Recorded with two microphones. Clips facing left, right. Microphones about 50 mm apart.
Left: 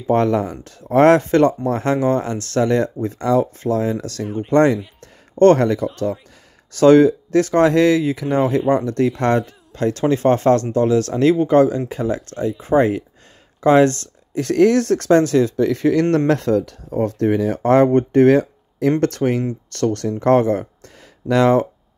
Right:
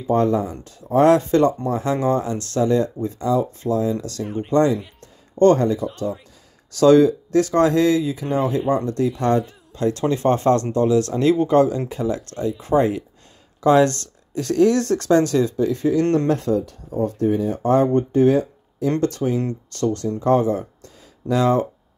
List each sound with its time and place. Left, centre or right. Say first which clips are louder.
0.0 s speech: left 2 dB; left
4.2 s speech: left 2 dB; centre
4.5 s speech: left 3 dB; left
6.7 s speech: left 2 dB; left
15.5 s speech: left 3 dB; left